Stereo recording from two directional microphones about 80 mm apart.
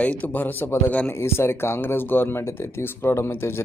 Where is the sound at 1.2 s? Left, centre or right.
Left.